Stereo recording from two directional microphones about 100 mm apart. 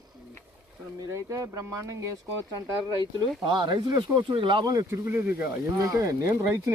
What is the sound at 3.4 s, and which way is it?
Speech, 50° right (ahead or behind).